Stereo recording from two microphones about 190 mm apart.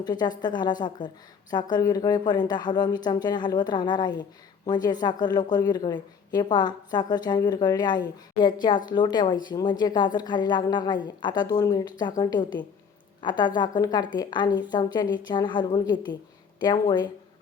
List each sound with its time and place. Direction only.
0.0 s speech: 20° left (ahead or behind)